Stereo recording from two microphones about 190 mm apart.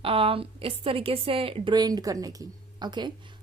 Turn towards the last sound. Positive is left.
turn(degrees=-25)  # may be behind; listen again after turning